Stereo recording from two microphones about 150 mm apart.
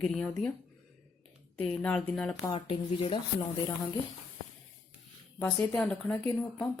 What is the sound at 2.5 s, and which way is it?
Speech, 35° left (ahead or behind).